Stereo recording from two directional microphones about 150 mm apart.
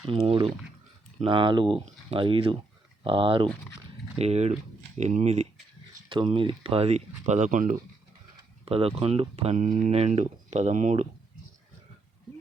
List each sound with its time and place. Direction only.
0.0 s speech: 35° right (ahead or behind)
4.2 s speech: 45° right (ahead or behind)
5.9 s speech: 30° right (ahead or behind); by 7.8 s 60° right (ahead or behind)
8.6 s speech: 40° right (ahead or behind)
9.6 s speech: 55° right (ahead or behind)